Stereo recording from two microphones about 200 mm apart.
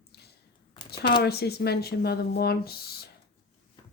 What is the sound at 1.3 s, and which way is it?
Speech, 55° left (ahead or behind).